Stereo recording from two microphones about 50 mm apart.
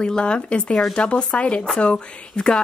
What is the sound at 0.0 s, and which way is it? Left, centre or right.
A woman's voice, centre.